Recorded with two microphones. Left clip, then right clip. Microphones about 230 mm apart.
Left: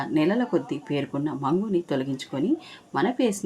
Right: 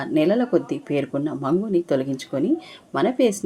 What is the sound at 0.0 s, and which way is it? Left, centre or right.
Speech, centre.